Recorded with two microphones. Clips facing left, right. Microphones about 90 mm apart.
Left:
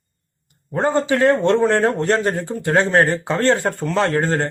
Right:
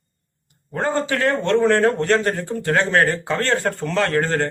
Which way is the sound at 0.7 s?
20° left (ahead or behind).